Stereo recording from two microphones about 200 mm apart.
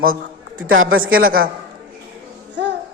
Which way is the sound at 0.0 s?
45° right (ahead or behind).